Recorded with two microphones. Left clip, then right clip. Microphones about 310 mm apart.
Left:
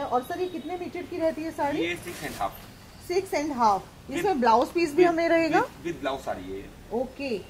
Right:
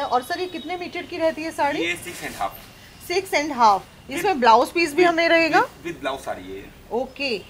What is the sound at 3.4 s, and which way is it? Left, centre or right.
A woman's voice, centre.